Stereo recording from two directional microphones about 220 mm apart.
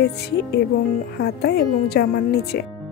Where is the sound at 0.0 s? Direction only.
45° left (ahead or behind).